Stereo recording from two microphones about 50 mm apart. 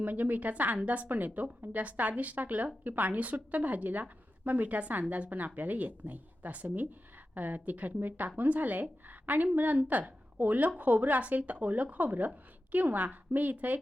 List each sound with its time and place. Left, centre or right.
0.0 s a woman's voice: right